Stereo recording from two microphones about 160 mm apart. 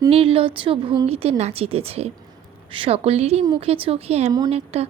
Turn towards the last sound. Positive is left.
turn(degrees=-40)  # may be behind; listen again after turning